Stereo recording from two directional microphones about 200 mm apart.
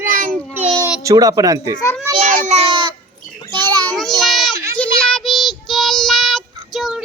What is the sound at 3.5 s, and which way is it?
Children playing, 20° right (ahead or behind).